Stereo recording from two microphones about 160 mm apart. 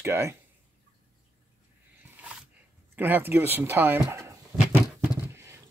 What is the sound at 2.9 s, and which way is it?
Speech, 10° right (ahead or behind).